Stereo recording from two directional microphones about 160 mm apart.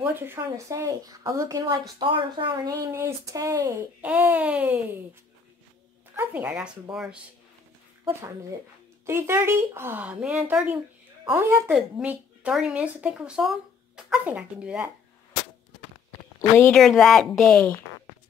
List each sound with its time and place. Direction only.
0.0 s speech: 15° right (ahead or behind); by 2.7 s 30° right (ahead or behind)
2.9 s speech: 15° right (ahead or behind)
6.1 s speech: 10° right (ahead or behind)
8.1 s speech: 20° right (ahead or behind)
16.1 s a sound: 15° left (ahead or behind)
16.8 s speech: centre (ahead or behind)